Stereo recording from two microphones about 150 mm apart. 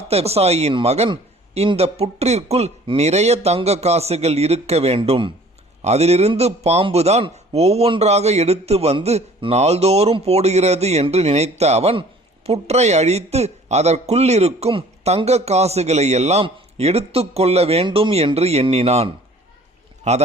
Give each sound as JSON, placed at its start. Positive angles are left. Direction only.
{"t": 0.1, "sound": "a man's voice", "side_deg": -45}
{"t": 5.8, "sound": "a man's voice", "side_deg": -45}